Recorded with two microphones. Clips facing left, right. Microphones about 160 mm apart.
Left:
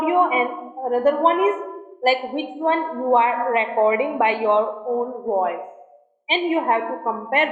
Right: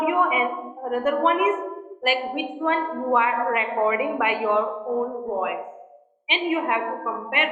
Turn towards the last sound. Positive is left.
turn(degrees=40)  # may be behind; listen again after turning